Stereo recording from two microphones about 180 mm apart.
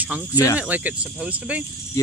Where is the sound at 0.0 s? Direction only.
10° right (ahead or behind).